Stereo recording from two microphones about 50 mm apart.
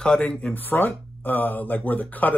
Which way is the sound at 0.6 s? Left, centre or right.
Left.